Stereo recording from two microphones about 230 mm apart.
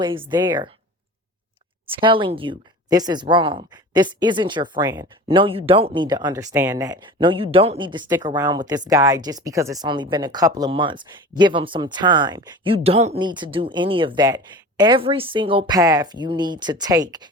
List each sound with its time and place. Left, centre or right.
0.0 s speech: right
1.9 s speech: right